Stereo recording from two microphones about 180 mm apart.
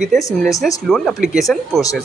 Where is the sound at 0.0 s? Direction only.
Centre (ahead or behind).